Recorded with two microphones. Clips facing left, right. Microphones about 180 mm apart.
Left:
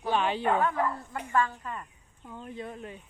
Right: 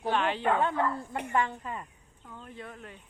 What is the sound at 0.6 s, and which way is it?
Speech, 25° right (ahead or behind).